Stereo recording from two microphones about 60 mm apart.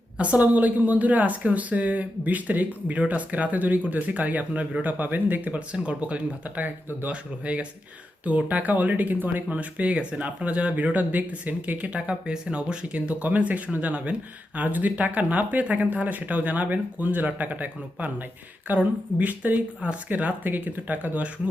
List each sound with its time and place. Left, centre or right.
0.2 s speech: right